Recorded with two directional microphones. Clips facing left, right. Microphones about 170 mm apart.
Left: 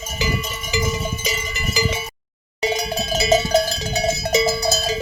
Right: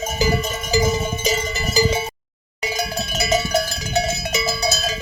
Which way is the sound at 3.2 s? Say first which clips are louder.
Left 3 dB; 25° left (ahead or behind).